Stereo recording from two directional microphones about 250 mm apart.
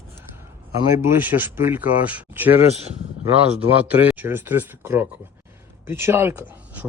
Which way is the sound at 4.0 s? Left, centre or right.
Centre.